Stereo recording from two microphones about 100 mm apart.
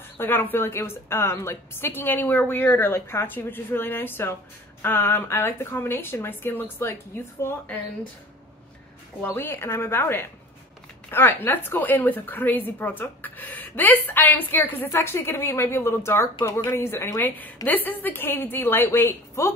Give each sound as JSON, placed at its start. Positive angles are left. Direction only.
{"t": 0.2, "sound": "a woman's voice", "side_deg": 20}
{"t": 9.3, "sound": "a woman's voice", "side_deg": 25}